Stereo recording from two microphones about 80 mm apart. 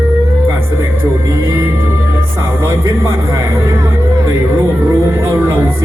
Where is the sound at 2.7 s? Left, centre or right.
Right.